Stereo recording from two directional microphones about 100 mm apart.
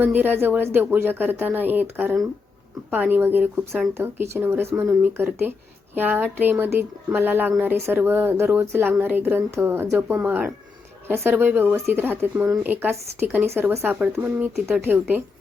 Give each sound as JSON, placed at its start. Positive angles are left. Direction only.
{"t": 0.0, "sound": "speech", "side_deg": -20}